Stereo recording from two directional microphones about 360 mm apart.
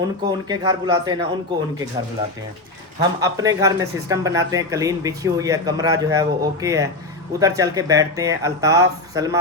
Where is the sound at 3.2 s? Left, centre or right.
Centre.